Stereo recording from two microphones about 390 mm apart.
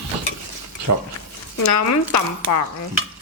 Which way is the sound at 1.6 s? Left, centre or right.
Left.